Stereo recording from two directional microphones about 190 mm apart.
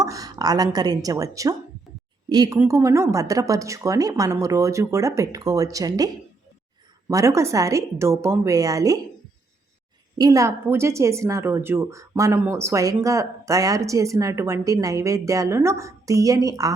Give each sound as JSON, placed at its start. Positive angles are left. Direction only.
{"t": 0.0, "sound": "a woman's voice", "side_deg": -20}
{"t": 7.1, "sound": "a woman's voice", "side_deg": -15}
{"t": 10.2, "sound": "a woman's voice", "side_deg": -20}